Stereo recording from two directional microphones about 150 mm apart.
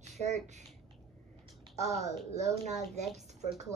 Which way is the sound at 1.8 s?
50° right (ahead or behind).